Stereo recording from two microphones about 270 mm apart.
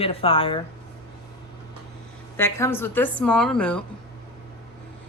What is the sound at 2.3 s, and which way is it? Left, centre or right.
A woman's voice, centre.